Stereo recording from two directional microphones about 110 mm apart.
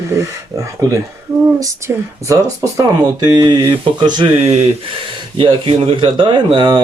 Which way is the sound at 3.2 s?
40° right (ahead or behind).